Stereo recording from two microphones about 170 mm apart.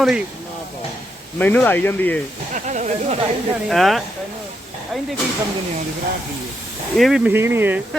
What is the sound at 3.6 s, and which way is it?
Speech, centre (ahead or behind).